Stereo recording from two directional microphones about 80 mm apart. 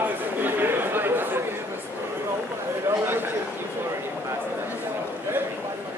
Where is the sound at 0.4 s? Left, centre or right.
Right.